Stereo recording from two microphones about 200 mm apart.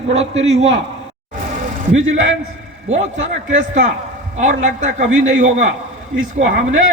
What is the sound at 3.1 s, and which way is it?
A man's voice, 35° right (ahead or behind).